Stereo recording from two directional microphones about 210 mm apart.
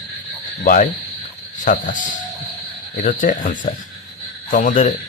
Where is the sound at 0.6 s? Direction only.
40° left (ahead or behind).